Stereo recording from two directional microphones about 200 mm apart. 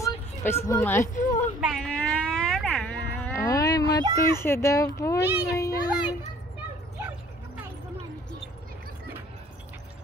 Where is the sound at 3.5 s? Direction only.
20° left (ahead or behind).